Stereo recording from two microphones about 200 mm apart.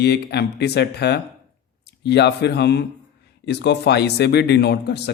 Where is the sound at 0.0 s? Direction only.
55° left (ahead or behind).